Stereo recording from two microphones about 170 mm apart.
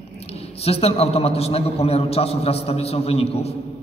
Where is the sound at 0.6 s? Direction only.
35° left (ahead or behind).